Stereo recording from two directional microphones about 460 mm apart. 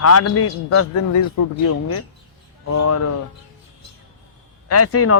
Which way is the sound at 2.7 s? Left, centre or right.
Left.